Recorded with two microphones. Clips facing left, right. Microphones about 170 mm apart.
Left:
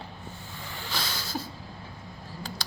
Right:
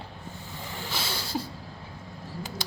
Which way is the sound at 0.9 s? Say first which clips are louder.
Right 2 dB; 30° right (ahead or behind).